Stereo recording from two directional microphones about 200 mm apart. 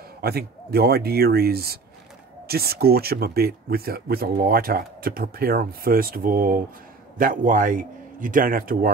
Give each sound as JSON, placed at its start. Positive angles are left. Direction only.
{"t": 0.2, "sound": "speech", "side_deg": -50}